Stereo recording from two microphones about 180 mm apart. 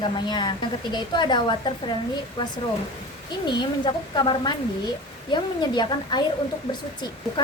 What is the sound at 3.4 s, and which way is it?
A woman's voice, 25° left (ahead or behind).